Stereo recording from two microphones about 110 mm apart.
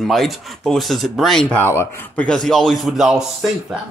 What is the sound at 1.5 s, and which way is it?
Speech, 20° left (ahead or behind).